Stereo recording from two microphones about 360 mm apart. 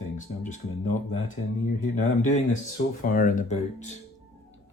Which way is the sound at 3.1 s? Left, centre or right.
Left.